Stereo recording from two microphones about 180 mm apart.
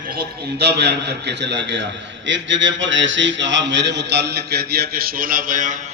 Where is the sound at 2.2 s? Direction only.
90° right; by 5.7 s 45° right (ahead or behind).